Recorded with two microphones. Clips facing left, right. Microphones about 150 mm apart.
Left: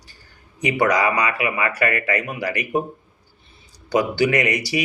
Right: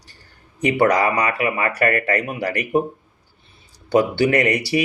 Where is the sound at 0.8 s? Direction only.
35° right (ahead or behind).